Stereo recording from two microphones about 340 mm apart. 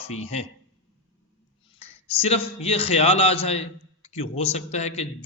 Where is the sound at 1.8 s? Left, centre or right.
Centre.